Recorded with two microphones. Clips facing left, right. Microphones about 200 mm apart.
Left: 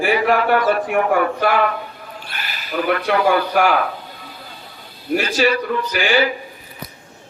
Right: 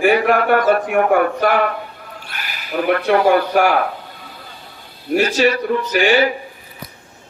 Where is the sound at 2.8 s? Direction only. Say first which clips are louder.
Right 3 dB; 40° right (ahead or behind).